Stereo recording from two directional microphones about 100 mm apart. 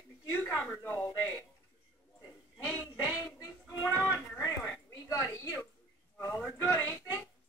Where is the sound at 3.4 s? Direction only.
25° left (ahead or behind).